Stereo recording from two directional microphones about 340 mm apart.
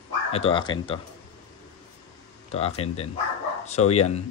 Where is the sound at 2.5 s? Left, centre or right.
Centre.